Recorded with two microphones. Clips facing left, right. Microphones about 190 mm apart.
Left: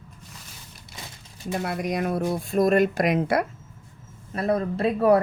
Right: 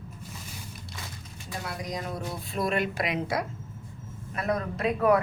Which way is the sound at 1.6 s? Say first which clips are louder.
Left 7 dB; 60° left (ahead or behind).